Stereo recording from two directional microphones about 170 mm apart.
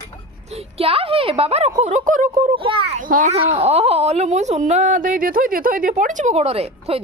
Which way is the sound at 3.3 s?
35° right (ahead or behind).